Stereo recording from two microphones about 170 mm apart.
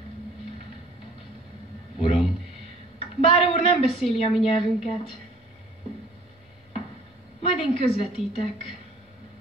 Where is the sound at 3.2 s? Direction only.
35° left (ahead or behind).